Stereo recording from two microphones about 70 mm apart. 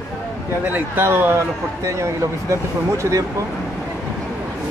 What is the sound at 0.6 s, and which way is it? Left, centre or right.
Speech, right.